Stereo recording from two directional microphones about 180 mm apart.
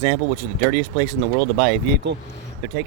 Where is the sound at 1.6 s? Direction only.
55° right (ahead or behind).